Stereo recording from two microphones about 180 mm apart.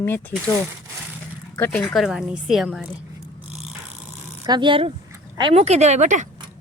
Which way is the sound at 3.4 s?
5° right (ahead or behind).